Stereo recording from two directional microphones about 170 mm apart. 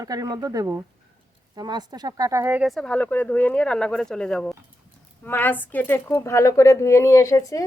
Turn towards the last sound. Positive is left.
turn(degrees=20)  # may be behind; listen again after turning